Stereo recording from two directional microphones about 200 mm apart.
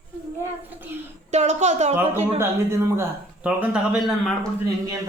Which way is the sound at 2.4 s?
15° right (ahead or behind).